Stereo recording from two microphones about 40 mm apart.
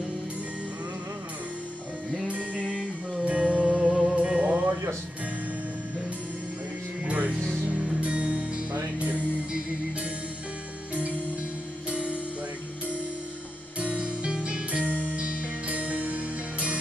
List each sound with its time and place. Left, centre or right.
2.2 s music: right
7.1 s music: right
11.9 s music: right
13.7 s music: right